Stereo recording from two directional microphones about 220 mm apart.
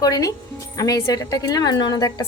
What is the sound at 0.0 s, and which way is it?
A woman's voice, 15° left (ahead or behind).